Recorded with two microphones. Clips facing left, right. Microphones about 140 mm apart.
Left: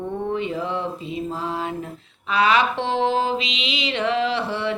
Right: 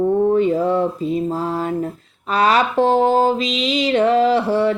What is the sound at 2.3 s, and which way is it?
Mantra, 40° right (ahead or behind).